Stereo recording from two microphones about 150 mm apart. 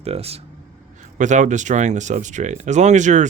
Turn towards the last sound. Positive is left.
turn(degrees=-55)  # may be behind; listen again after turning